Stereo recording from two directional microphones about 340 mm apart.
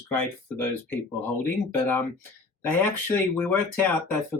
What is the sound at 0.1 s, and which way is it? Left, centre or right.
Speech, centre.